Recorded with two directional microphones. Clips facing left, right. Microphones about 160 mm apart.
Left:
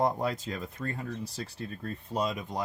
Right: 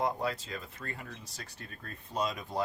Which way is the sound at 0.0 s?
45° left (ahead or behind).